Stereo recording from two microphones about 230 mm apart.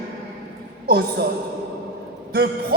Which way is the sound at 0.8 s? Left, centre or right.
Right.